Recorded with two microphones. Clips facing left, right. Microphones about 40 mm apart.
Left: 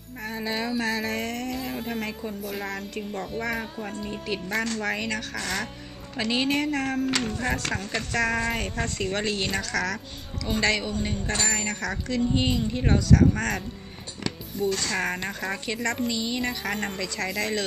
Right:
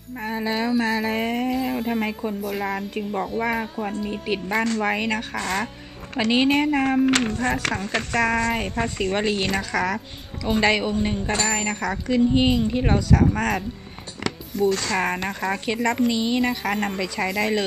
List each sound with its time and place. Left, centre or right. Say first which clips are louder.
0.2 s a woman's voice: right 5 dB; centre
1.6 s a sound: right 7 dB; centre
2.0 s a woman's voice: right 6 dB; centre
4.1 s a woman's voice: right 2 dB; centre
8.1 s a woman's voice: right 4 dB; centre
8.7 s a woman's voice: right 5 dB; right
14.7 s speech: right 4 dB; right
15.2 s a woman's voice: right 5 dB; centre